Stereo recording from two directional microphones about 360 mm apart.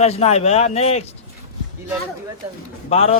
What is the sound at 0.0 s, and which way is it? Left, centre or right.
A man's voice, centre.